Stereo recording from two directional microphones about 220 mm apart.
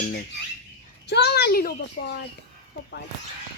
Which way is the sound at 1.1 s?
50° left (ahead or behind).